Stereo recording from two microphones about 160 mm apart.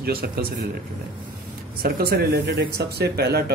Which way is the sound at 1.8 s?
70° right (ahead or behind).